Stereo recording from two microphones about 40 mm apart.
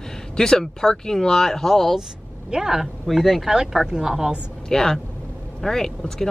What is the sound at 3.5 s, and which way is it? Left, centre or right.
Speech, centre.